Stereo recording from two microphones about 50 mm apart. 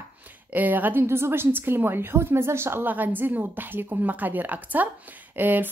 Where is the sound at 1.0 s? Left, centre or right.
Right.